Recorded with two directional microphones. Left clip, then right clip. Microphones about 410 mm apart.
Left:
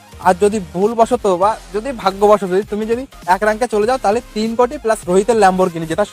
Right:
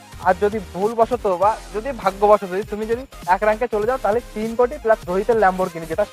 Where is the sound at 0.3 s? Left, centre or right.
Left.